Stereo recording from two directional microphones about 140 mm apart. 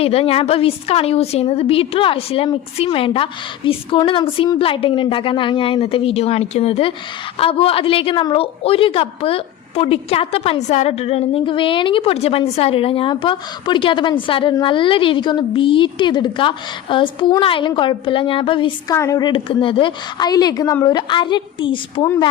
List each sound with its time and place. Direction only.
0.0 s a woman's voice: 45° left (ahead or behind)
18.9 s a woman's voice: 25° left (ahead or behind)
19.3 s a woman's voice: 40° left (ahead or behind)